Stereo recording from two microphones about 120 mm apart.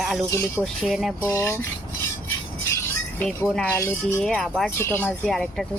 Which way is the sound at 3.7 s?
20° left (ahead or behind).